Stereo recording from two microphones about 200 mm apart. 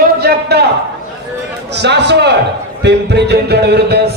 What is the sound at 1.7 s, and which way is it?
Speech, 60° right (ahead or behind).